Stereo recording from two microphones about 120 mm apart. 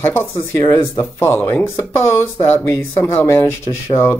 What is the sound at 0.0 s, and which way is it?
Speech, 20° left (ahead or behind).